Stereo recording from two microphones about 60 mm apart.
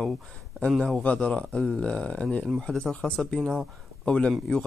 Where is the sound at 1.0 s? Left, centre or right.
Centre.